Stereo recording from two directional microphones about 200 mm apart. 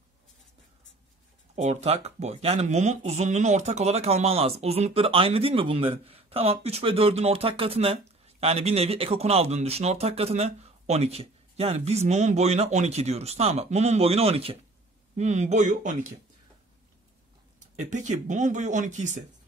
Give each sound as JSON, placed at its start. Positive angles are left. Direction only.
{"t": 1.5, "sound": "speech", "side_deg": -35}
{"t": 17.8, "sound": "speech", "side_deg": -35}